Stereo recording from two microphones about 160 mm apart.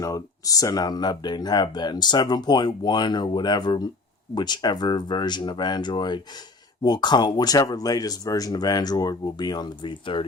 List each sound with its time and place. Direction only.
0.0 s speech: 20° left (ahead or behind)